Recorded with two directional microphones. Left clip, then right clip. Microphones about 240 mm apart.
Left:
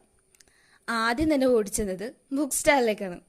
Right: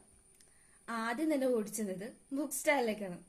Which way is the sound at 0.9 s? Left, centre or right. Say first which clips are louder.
Left 10 dB; left.